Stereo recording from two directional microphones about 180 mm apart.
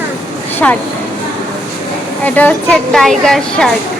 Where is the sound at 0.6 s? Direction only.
5° left (ahead or behind).